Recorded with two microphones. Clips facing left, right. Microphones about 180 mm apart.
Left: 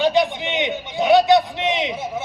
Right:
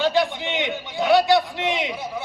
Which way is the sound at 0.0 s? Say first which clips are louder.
Left 3 dB; 20° left (ahead or behind).